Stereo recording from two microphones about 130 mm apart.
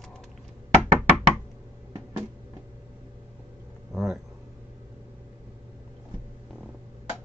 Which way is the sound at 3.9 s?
Centre (ahead or behind).